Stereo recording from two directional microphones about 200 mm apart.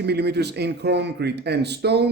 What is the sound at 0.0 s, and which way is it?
Speech, 55° right (ahead or behind).